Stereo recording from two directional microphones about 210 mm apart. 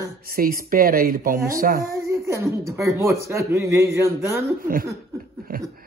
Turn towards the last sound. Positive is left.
turn(degrees=-45)  # may be behind; listen again after turning